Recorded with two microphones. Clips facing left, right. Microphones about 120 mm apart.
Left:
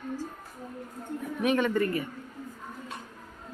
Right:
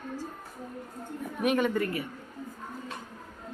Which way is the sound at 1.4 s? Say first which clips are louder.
Left 1 dB; 5° right (ahead or behind).